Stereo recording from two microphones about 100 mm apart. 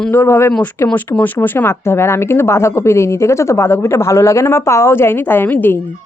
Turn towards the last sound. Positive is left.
turn(degrees=20)  # may be behind; listen again after turning